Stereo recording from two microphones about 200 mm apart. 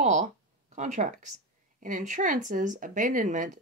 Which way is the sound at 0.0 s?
35° right (ahead or behind).